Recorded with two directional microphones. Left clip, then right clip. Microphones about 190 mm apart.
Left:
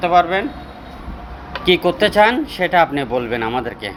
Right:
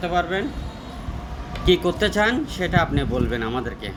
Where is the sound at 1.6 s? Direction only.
20° right (ahead or behind).